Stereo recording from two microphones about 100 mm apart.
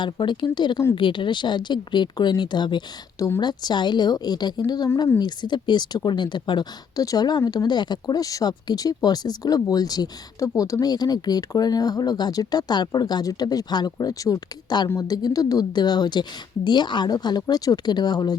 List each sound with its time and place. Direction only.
0.0 s speech: 50° left (ahead or behind)